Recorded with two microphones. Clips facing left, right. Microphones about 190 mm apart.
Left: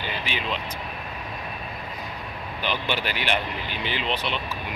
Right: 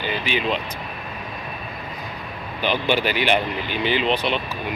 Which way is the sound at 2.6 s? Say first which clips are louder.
Right 7 dB; 5° right (ahead or behind).